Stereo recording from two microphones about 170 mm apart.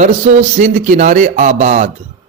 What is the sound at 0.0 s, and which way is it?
Speech, 45° right (ahead or behind).